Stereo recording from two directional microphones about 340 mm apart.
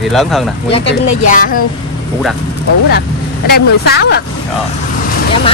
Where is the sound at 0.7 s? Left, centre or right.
Centre.